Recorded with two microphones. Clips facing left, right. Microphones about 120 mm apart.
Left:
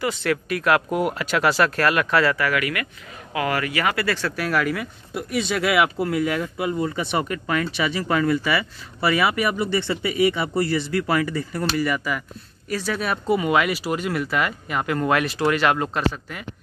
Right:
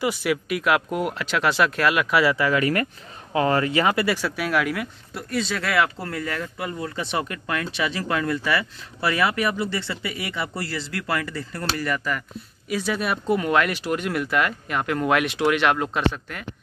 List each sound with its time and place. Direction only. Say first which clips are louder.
0.0 s speech: even; 10° right (ahead or behind)
2.3 s speech: right 1 dB; 20° right (ahead or behind)
2.6 s speech: right 5 dB; 35° right (ahead or behind); by 4.8 s centre (ahead or behind)
5.1 s speech: left 3 dB; 15° left (ahead or behind)